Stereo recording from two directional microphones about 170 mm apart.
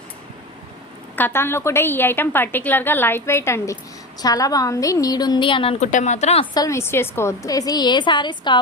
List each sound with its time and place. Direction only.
1.1 s a woman's voice: 10° left (ahead or behind); by 5.7 s 30° left (ahead or behind)
5.8 s speech: 45° left (ahead or behind)
6.5 s a woman's voice: 20° left (ahead or behind)